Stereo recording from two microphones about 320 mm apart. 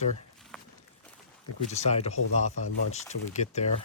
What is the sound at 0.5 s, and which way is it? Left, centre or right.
Walk, centre.